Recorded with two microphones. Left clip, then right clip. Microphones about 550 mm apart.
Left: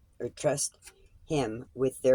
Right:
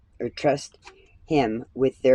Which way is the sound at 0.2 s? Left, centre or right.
Left.